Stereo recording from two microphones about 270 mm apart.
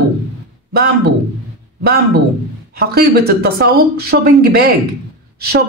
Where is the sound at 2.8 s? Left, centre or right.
Right.